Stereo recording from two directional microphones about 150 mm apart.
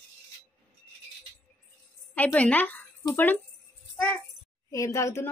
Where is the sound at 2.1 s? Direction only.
10° left (ahead or behind).